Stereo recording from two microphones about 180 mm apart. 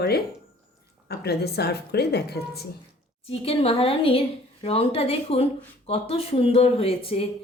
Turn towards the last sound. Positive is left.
turn(degrees=30)  # may be behind; listen again after turning